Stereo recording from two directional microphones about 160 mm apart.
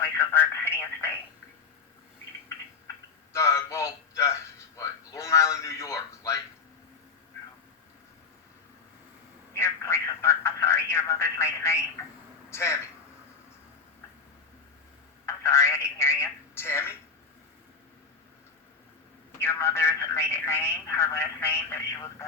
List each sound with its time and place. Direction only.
0.0 s speech: 15° left (ahead or behind)
3.3 s speech: 15° left (ahead or behind)
4.8 s a sound: 20° left (ahead or behind)
9.5 s telephone: 15° left (ahead or behind)
12.5 s speech: 15° left (ahead or behind)
15.3 s telephone: 15° left (ahead or behind)
19.4 s speech: 15° left (ahead or behind)